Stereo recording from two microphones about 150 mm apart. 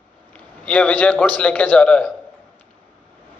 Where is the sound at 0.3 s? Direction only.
5° left (ahead or behind).